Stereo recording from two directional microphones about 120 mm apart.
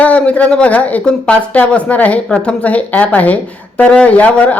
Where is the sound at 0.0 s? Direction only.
10° left (ahead or behind).